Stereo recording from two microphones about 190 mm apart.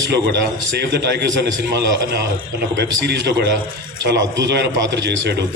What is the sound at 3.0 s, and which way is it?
A man's voice, 65° right (ahead or behind).